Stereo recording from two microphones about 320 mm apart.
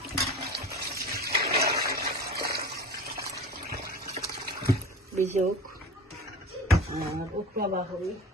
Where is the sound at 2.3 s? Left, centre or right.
Right.